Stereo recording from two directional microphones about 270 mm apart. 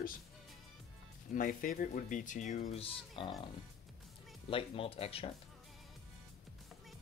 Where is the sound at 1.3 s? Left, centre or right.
Left.